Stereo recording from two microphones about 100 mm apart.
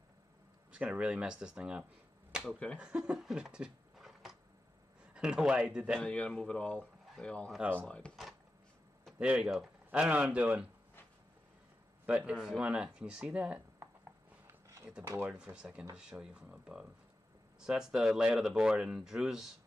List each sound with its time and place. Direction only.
0.7 s speech: 10° right (ahead or behind)
2.4 s speech: 15° left (ahead or behind)
2.8 s speech: 10° right (ahead or behind)
6.0 s speech: 10° left (ahead or behind)
8.0 s a sound: 10° left (ahead or behind)
9.2 s speech: 10° right (ahead or behind)
12.2 s speech: 5° right (ahead or behind)
14.5 s a sound: 30° right (ahead or behind)
15.3 s speech: 10° right (ahead or behind)